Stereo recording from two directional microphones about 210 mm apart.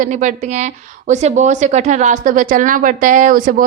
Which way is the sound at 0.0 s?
35° right (ahead or behind).